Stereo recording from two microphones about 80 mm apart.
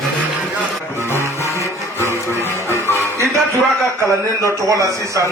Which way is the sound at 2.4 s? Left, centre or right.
Left.